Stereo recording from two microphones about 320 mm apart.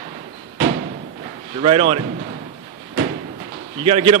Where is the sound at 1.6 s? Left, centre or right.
Centre.